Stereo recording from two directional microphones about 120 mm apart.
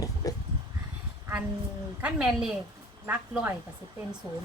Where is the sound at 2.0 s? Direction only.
5° right (ahead or behind).